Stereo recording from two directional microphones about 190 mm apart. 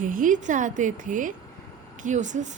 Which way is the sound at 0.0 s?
45° right (ahead or behind).